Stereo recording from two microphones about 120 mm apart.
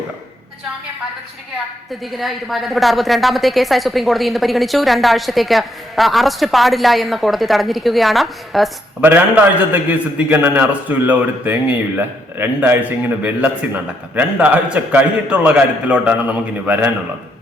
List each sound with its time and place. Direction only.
1.9 s a woman's voice: centre (ahead or behind)
9.0 s a man's voice: 15° right (ahead or behind)